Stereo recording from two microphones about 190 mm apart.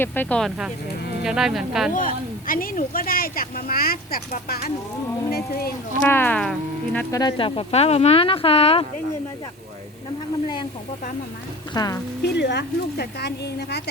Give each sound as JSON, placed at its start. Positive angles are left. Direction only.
{"t": 0.0, "sound": "speech", "side_deg": 10}
{"t": 1.9, "sound": "speech", "side_deg": 45}
{"t": 6.0, "sound": "speech", "side_deg": 10}
{"t": 7.1, "sound": "speech", "side_deg": 20}
{"t": 11.7, "sound": "speech", "side_deg": 20}
{"t": 12.2, "sound": "speech", "side_deg": 60}